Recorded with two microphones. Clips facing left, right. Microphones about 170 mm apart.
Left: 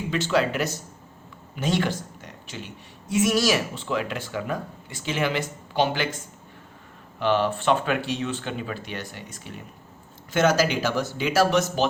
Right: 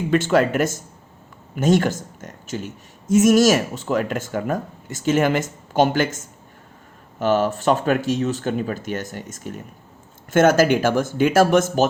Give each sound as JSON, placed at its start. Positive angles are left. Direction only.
{"t": 0.1, "sound": "a woman's voice", "side_deg": -50}